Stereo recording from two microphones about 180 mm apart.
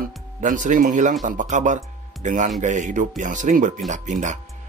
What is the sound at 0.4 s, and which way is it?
Speech, 45° right (ahead or behind).